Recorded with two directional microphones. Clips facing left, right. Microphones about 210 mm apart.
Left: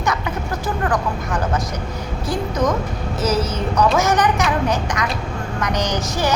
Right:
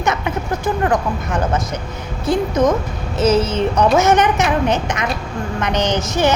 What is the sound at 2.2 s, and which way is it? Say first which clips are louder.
A woman's voice: right 5 dB; 25° right (ahead or behind).